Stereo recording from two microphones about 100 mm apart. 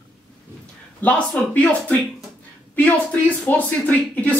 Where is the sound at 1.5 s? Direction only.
15° left (ahead or behind).